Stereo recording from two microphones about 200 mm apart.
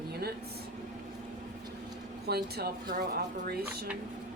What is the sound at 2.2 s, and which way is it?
Speech, 50° right (ahead or behind).